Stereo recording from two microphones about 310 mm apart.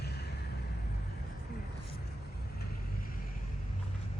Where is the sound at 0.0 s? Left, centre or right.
Left.